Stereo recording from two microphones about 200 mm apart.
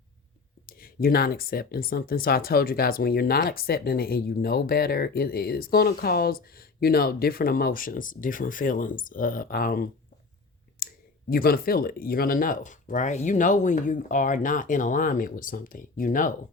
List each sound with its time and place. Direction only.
0.7 s speech: 45° left (ahead or behind)
10.8 s clicking: 45° left (ahead or behind)
11.3 s speech: 50° left (ahead or behind)